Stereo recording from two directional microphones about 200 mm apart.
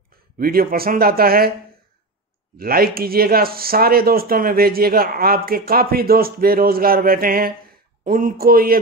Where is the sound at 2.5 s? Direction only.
50° right (ahead or behind).